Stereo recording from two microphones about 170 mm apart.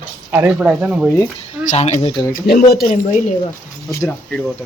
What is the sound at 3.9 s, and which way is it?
Speech, 15° left (ahead or behind).